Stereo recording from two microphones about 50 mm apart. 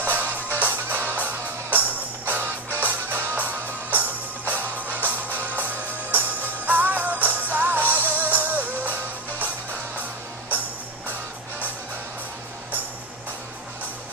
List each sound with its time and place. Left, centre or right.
0.0 s music: right